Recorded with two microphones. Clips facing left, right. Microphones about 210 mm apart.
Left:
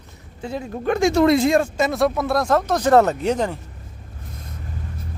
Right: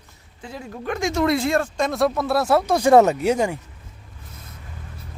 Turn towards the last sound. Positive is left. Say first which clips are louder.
# right 1 dB
turn(degrees=-10)  # may be behind; listen again after turning